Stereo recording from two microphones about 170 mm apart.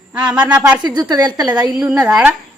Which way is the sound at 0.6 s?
20° right (ahead or behind).